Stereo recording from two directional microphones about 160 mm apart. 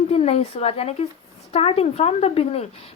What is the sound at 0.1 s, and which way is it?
Speech, 40° left (ahead or behind).